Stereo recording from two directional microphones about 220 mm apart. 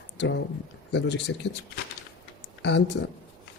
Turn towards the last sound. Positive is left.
turn(degrees=50)  # may be behind; listen again after turning